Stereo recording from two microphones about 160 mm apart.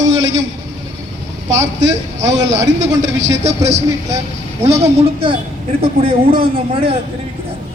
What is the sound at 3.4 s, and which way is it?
A man's voice, 45° right (ahead or behind).